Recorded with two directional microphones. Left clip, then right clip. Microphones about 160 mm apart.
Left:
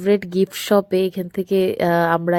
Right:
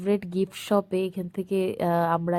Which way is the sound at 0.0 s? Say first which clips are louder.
Left 8 dB; 40° left (ahead or behind).